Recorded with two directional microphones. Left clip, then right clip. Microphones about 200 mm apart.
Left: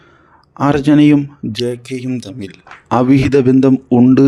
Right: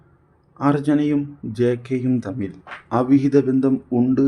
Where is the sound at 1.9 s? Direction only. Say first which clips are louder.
Even; 35° left (ahead or behind).